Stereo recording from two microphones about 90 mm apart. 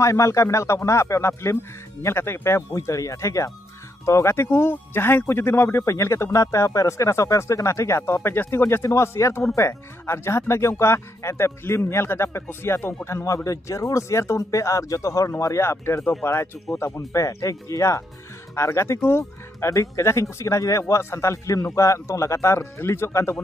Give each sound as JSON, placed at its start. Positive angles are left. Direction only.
{"t": 0.0, "sound": "speech", "side_deg": 35}
{"t": 16.0, "sound": "speech", "side_deg": 10}
{"t": 16.7, "sound": "speech", "side_deg": 30}